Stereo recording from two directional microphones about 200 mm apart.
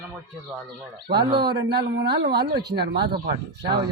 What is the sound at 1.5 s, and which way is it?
Speech, 55° right (ahead or behind).